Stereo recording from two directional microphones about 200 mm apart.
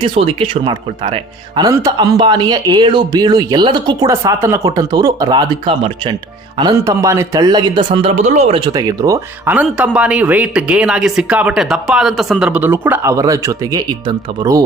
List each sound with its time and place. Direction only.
0.0 s speech: 30° right (ahead or behind)